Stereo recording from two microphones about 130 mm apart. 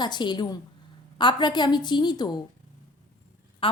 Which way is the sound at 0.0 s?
35° left (ahead or behind).